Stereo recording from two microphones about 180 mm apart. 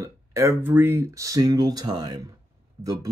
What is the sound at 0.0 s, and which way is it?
Speech, 15° right (ahead or behind).